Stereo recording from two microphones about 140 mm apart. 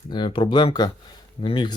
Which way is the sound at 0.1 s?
35° left (ahead or behind).